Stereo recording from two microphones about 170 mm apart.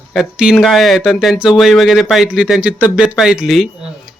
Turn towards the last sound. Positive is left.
turn(degrees=0)  # may be behind; listen again after turning